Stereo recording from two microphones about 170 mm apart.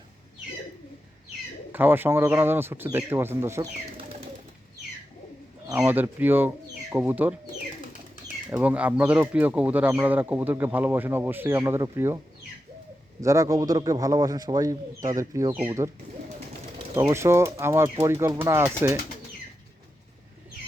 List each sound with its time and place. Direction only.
1.7 s speech: 10° right (ahead or behind)
5.6 s speech: 10° right (ahead or behind)
8.4 s speech: 10° right (ahead or behind)
13.2 s speech: 20° right (ahead or behind)
16.9 s speech: 15° right (ahead or behind)